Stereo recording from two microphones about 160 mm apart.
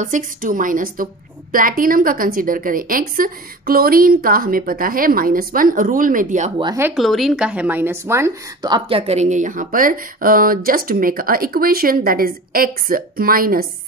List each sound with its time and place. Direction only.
0.0 s speech: 55° right (ahead or behind)
7.0 s speech: centre (ahead or behind); by 13.7 s 65° right (ahead or behind)